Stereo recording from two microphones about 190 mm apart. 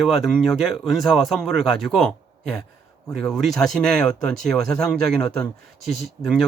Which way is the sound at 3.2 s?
Centre (ahead or behind).